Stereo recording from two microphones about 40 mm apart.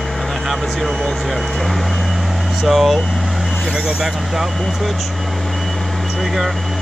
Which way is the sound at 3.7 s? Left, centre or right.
Centre.